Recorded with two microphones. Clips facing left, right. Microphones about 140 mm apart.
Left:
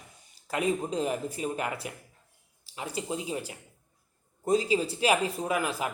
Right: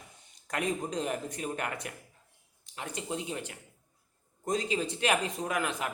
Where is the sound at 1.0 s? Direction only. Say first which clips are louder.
Left 3 dB; 5° left (ahead or behind).